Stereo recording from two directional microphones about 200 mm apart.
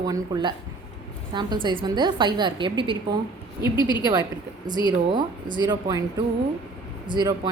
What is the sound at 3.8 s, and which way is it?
Speech, 20° left (ahead or behind).